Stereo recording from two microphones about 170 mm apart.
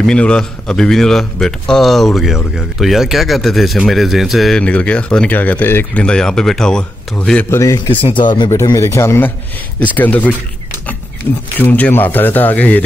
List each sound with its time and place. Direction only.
0.0 s a man's voice: 5° left (ahead or behind)
11.5 s speech: 10° left (ahead or behind)